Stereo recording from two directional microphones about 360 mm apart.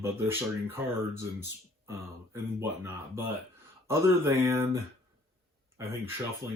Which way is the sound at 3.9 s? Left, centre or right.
Centre.